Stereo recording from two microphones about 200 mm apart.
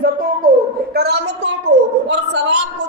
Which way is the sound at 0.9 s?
60° right (ahead or behind).